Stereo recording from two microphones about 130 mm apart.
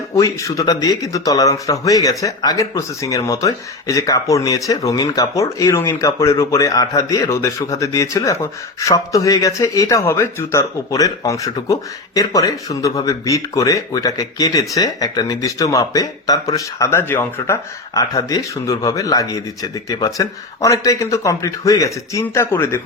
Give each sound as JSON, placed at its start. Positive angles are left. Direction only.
{"t": 0.1, "sound": "speech", "side_deg": 25}